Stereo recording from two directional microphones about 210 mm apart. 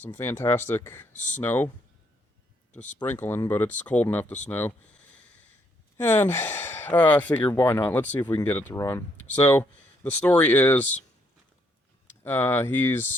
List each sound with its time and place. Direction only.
0.0 s speech: 10° left (ahead or behind)
1.1 s speech: 35° left (ahead or behind)
1.4 s speech: 10° left (ahead or behind)
3.0 s speech: 10° left (ahead or behind)
6.0 s speech: 10° left (ahead or behind)
12.0 s speech: 10° left (ahead or behind)